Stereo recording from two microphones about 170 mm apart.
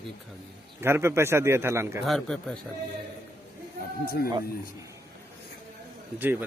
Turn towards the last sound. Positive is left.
turn(degrees=-10)  # may be behind; listen again after turning